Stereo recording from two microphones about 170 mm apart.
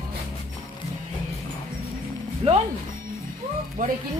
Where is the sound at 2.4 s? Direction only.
35° right (ahead or behind).